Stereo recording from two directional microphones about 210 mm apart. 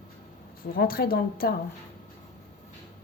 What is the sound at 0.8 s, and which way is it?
Speech, 45° left (ahead or behind).